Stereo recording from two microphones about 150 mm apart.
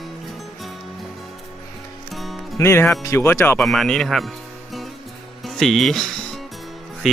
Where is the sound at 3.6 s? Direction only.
Centre (ahead or behind).